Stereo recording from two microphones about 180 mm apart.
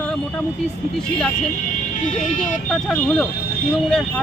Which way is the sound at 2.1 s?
40° left (ahead or behind).